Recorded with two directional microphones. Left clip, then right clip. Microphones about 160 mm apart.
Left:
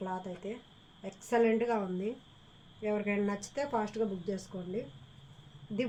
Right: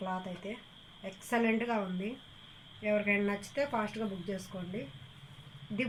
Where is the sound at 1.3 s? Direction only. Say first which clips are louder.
Left 3 dB; 65° left (ahead or behind).